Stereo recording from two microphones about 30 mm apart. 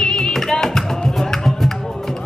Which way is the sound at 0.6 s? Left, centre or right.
Centre.